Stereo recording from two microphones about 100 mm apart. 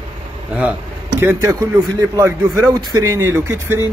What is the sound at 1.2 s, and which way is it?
Speech, 30° right (ahead or behind).